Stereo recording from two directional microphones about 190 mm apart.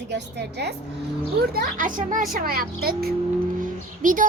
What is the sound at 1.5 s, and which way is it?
A child's voice, 45° right (ahead or behind).